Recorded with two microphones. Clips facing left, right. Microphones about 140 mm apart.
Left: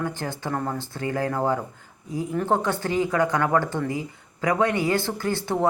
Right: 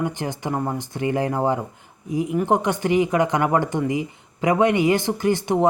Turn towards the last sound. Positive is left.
turn(degrees=-20)  # may be behind; listen again after turning